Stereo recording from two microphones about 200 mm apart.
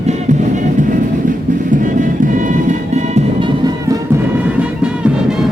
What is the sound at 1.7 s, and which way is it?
Music, 40° right (ahead or behind).